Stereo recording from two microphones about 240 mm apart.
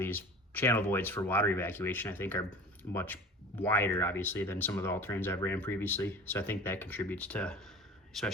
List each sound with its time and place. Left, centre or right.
0.0 s a man's voice: centre